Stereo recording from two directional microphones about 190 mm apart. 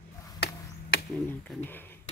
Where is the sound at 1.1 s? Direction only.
10° left (ahead or behind).